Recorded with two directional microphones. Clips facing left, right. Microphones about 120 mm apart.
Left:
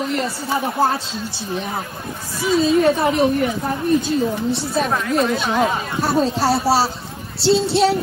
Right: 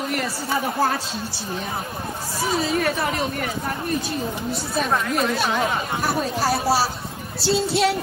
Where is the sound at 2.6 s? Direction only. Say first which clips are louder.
Left 7 dB; 20° left (ahead or behind).